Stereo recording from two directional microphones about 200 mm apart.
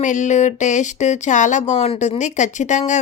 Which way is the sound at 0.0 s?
40° left (ahead or behind).